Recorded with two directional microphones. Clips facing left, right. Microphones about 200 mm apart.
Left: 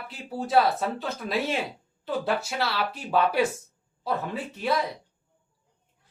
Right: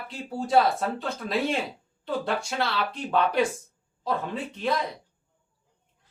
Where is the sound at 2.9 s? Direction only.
5° left (ahead or behind).